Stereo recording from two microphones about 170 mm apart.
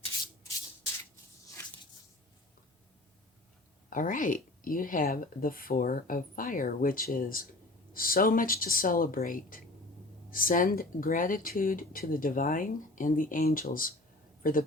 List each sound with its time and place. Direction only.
3.8 s speech: 50° left (ahead or behind)